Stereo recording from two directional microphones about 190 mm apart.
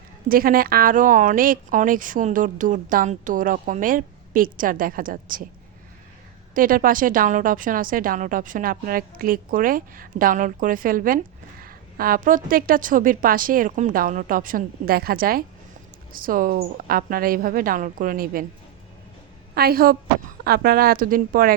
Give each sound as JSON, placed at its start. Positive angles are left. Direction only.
{"t": 0.3, "sound": "speech", "side_deg": -50}
{"t": 6.5, "sound": "speech", "side_deg": -45}
{"t": 19.5, "sound": "speech", "side_deg": -50}